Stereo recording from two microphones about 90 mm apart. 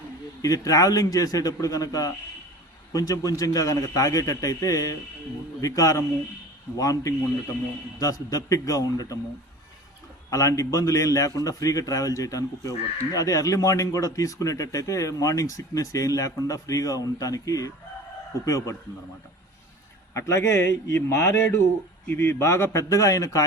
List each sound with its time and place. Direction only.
0.4 s speech: 40° left (ahead or behind)
10.2 s speech: 35° left (ahead or behind)
20.1 s speech: 35° left (ahead or behind)